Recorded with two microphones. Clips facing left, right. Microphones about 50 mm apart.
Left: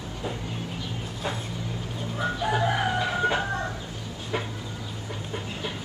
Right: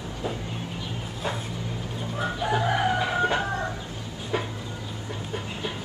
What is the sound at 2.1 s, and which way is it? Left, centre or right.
Chicken, centre.